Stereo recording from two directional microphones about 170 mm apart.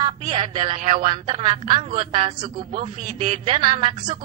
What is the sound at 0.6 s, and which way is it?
Speech, 50° right (ahead or behind).